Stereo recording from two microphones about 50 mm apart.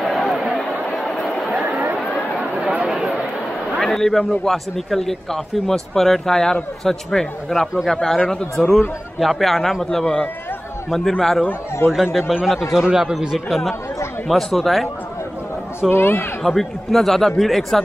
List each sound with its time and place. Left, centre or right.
0.0 s a sound: centre
0.8 s chatter: centre
2.5 s chatter: right
3.8 s a man's voice: centre
8.6 s a man's voice: centre
11.9 s a man's voice: centre
15.9 s a man's voice: left
16.4 s a man's voice: centre